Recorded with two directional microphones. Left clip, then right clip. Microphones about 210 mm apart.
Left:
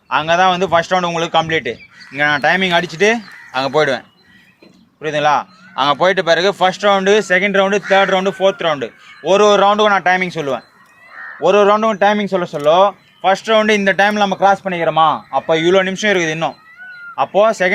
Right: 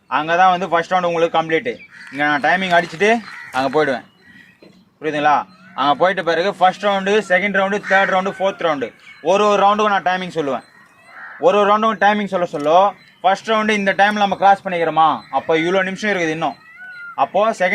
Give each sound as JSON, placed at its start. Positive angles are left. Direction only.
{"t": 0.1, "sound": "speech", "side_deg": 45}
{"t": 5.0, "sound": "speech", "side_deg": 45}